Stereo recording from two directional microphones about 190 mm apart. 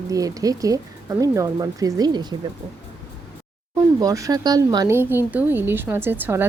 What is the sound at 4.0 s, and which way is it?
Speech, 20° right (ahead or behind).